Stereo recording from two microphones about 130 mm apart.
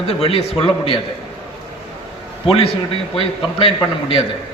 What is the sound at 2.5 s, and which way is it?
A man's voice, 45° left (ahead or behind).